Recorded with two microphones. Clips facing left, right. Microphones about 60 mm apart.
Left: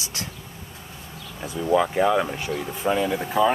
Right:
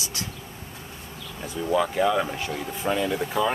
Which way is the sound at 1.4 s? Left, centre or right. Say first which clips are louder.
Left 3 dB; centre.